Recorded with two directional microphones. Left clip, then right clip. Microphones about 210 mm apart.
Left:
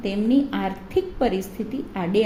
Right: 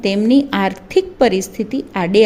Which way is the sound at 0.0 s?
45° right (ahead or behind).